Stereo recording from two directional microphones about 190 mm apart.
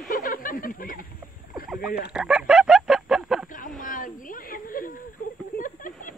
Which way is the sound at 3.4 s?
45° left (ahead or behind).